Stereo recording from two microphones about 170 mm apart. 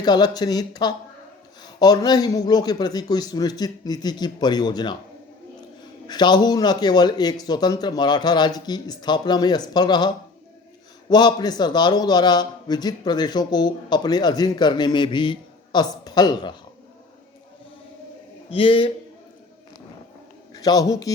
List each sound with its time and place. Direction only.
0.0 s a man's voice: 25° left (ahead or behind)
6.1 s a man's voice: 25° left (ahead or behind)
11.1 s a man's voice: 25° left (ahead or behind)
18.5 s a man's voice: 30° left (ahead or behind)
20.5 s a man's voice: 20° left (ahead or behind)